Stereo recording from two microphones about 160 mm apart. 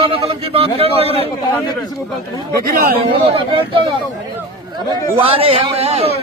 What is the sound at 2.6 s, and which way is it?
Speech, 65° right (ahead or behind).